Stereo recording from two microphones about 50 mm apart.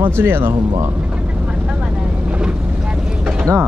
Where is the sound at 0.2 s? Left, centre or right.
Right.